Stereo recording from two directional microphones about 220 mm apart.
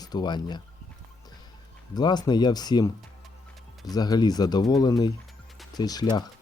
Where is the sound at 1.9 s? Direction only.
20° left (ahead or behind).